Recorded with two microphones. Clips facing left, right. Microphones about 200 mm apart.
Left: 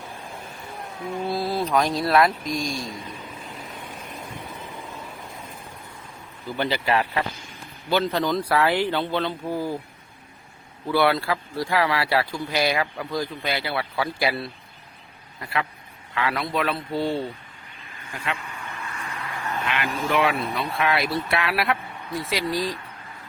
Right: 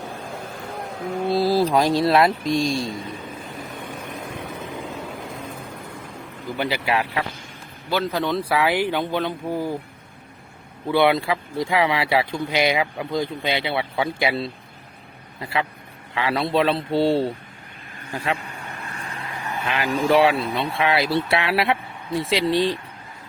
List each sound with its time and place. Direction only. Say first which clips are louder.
1.3 s speech: right 6 dB; 30° right (ahead or behind)
6.6 s speech: even; 10° right (ahead or behind)
10.8 s speech: right 3 dB; 20° right (ahead or behind)
18.1 s vehicle: right 5 dB; 35° right (ahead or behind); by 19.5 s 20° right (ahead or behind)
19.6 s speech: right 7 dB; 35° right (ahead or behind)